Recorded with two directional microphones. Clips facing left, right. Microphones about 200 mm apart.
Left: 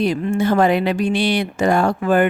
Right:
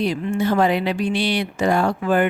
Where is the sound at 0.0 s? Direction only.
50° left (ahead or behind).